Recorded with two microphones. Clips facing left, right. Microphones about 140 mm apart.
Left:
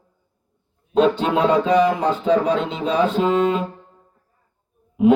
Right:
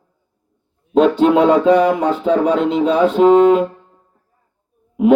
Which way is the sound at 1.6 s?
65° right (ahead or behind).